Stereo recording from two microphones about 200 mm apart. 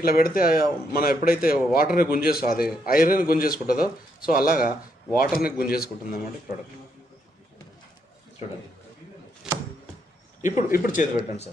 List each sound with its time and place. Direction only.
0.0 s speech: 45° left (ahead or behind)
9.5 s a sound: 5° right (ahead or behind)
10.4 s speech: 45° left (ahead or behind)